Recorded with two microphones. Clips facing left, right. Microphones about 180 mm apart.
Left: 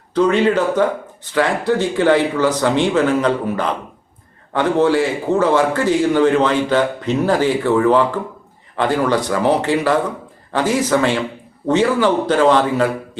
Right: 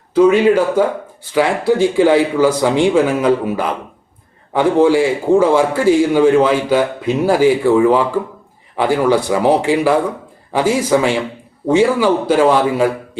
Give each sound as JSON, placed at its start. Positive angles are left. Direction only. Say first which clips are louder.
{"t": 0.1, "sound": "speech", "louder": "right 4 dB", "side_deg": -10}